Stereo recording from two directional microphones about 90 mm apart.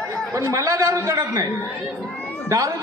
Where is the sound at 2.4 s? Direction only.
40° right (ahead or behind).